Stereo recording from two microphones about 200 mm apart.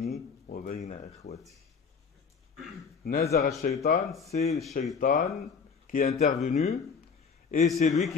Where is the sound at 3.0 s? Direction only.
40° left (ahead or behind).